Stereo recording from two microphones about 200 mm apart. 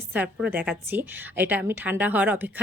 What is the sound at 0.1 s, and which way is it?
A woman's voice, 10° right (ahead or behind).